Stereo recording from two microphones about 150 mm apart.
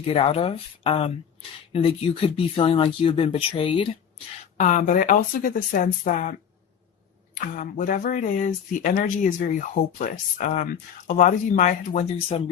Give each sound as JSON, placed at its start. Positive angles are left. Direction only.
{"t": 0.0, "sound": "speech", "side_deg": 40}
{"t": 4.5, "sound": "speech", "side_deg": 55}
{"t": 7.3, "sound": "speech", "side_deg": 60}